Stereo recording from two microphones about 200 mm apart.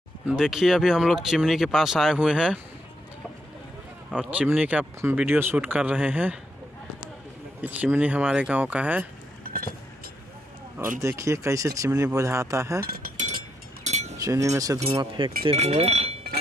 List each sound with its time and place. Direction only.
0.3 s speech: centre (ahead or behind)
4.2 s speech: 5° right (ahead or behind)
7.6 s speech: 10° right (ahead or behind)
9.4 s a sound: 45° right (ahead or behind)
11.0 s speech: 15° right (ahead or behind)
12.8 s speech: 45° right (ahead or behind)
13.8 s a sound: 35° right (ahead or behind)
14.1 s speech: 15° right (ahead or behind)